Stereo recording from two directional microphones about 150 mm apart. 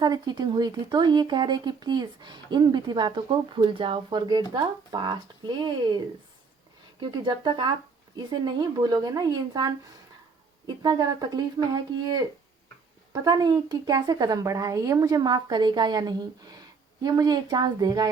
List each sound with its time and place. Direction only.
0.0 s a woman's voice: 30° right (ahead or behind)
7.0 s a woman's voice: 30° right (ahead or behind)
10.8 s a woman's voice: 25° right (ahead or behind)